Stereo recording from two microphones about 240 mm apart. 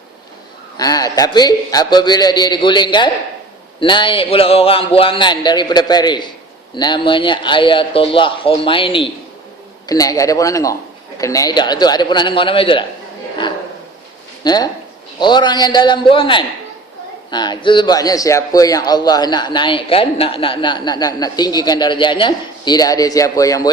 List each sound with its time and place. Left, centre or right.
0.8 s a man's voice: centre
14.4 s a man's voice: centre